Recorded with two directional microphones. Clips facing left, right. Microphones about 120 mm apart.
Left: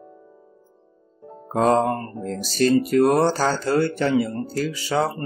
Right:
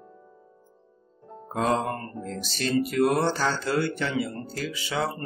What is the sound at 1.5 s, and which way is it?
Speech, 40° left (ahead or behind).